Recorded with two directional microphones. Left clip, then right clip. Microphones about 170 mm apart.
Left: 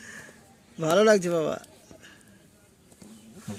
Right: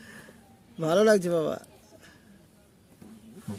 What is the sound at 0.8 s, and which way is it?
A man's voice, centre (ahead or behind).